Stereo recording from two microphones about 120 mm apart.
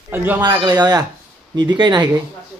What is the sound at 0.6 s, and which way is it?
Speech, 35° right (ahead or behind).